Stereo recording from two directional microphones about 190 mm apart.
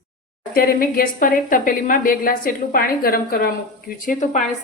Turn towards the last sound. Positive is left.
turn(degrees=45)  # may be behind; listen again after turning